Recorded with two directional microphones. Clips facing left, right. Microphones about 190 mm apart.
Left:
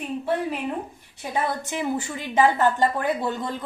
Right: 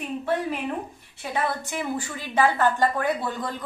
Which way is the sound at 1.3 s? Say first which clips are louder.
Left 1 dB; 20° left (ahead or behind).